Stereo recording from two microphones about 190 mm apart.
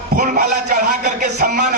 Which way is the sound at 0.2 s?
40° right (ahead or behind).